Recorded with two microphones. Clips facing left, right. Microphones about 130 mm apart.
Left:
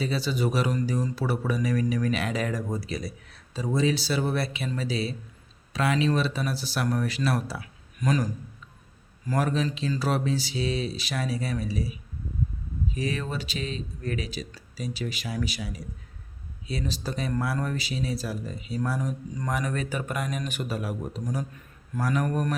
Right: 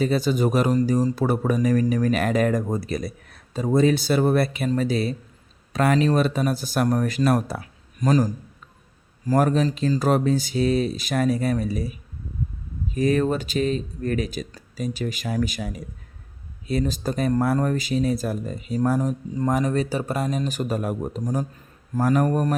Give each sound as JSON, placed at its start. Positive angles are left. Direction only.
{"t": 0.0, "sound": "speech", "side_deg": -45}